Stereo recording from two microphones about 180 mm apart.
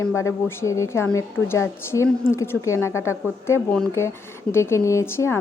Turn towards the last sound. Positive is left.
turn(degrees=15)  # may be behind; listen again after turning